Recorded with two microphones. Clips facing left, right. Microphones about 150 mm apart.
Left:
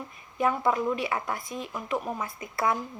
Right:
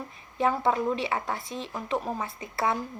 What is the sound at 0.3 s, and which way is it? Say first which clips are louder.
A woman's voice: even; 30° right (ahead or behind).